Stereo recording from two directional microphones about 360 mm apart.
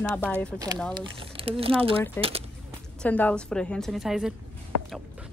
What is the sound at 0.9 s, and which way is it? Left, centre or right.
Speech, centre.